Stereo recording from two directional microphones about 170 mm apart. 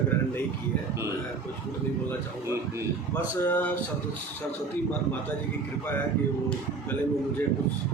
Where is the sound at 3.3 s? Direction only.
10° left (ahead or behind).